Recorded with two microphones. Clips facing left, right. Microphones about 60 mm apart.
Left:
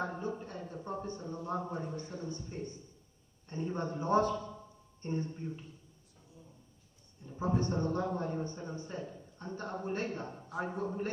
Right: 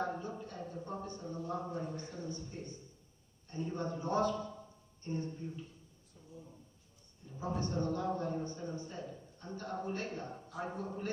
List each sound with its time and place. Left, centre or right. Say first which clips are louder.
0.2 s a man's voice: left 4 dB; left
7.3 s a man's voice: left 4 dB; left